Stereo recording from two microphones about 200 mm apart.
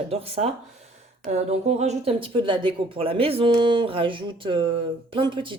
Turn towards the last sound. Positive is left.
turn(degrees=-25)  # may be behind; listen again after turning